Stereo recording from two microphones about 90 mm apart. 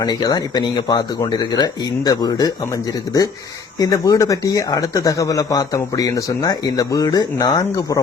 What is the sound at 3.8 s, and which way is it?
Speech, 40° left (ahead or behind).